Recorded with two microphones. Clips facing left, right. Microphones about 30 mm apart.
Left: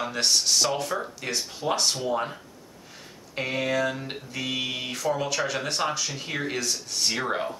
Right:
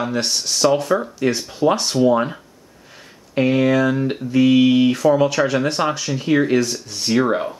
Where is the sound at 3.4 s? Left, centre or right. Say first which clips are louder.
Right 10 dB; centre.